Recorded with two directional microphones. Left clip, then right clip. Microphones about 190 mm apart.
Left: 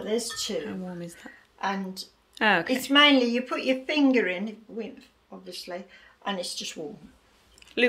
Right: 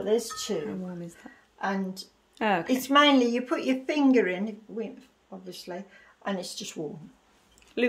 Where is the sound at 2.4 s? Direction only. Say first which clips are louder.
Left 4 dB; 5° right (ahead or behind).